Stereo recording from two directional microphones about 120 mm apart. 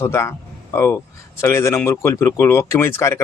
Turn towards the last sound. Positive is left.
turn(degrees=20)  # may be behind; listen again after turning